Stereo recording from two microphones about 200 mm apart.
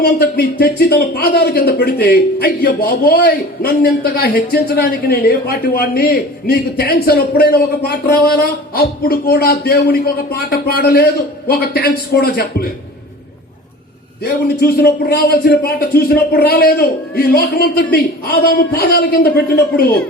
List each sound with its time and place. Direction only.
0.0 s speech: 50° left (ahead or behind)
14.3 s speech: 50° left (ahead or behind)